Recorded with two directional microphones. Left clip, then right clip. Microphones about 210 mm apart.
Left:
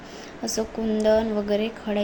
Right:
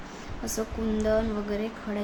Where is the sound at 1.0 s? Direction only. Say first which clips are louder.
Left 6 dB; 15° left (ahead or behind).